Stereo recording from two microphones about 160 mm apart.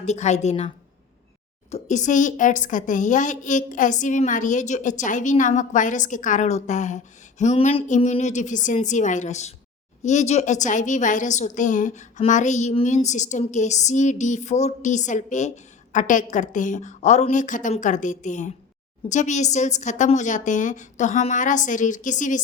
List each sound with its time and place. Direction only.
0.0 s a woman's voice: 45° left (ahead or behind)
1.7 s a woman's voice: 50° left (ahead or behind)